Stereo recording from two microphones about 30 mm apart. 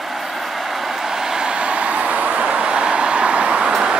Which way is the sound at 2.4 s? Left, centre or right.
Right.